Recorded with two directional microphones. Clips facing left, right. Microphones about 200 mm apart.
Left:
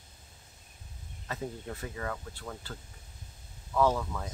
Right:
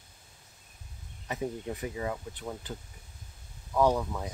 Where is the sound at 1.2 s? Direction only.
15° right (ahead or behind).